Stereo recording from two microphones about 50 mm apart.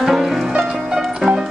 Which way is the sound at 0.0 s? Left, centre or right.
Centre.